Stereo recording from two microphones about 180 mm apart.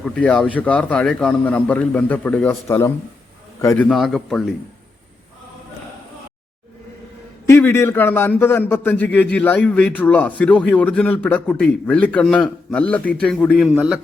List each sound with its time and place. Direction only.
0.0 s a man's voice: 5° left (ahead or behind)
3.8 s a man's voice: centre (ahead or behind)
7.4 s a man's voice: 15° left (ahead or behind); by 14.0 s 5° right (ahead or behind)